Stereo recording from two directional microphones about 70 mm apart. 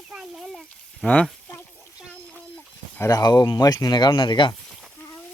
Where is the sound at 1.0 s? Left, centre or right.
Centre.